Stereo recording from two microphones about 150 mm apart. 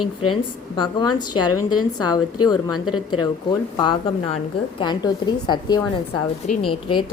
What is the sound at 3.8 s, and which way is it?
A woman's voice, 35° left (ahead or behind).